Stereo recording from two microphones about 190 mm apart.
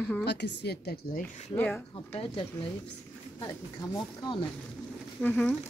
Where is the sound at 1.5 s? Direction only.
10° left (ahead or behind).